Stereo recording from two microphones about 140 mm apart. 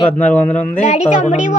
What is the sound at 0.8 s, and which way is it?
Speech, 55° left (ahead or behind).